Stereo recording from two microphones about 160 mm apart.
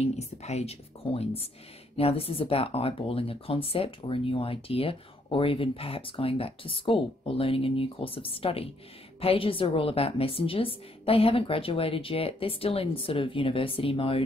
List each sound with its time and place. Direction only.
0.0 s speech: 45° left (ahead or behind)